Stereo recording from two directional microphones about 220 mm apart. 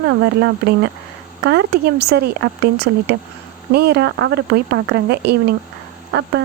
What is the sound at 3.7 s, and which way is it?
Speech, 50° right (ahead or behind).